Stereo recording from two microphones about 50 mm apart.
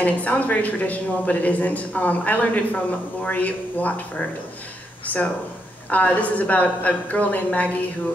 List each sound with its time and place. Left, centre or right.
0.0 s a woman's voice: left